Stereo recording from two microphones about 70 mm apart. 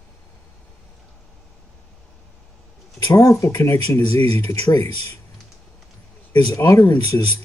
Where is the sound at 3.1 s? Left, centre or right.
Left.